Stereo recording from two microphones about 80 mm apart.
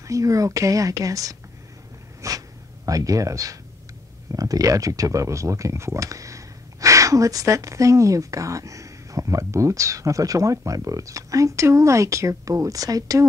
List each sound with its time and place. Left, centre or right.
0.0 s speech: right
2.2 s a sound: right
4.3 s speech: right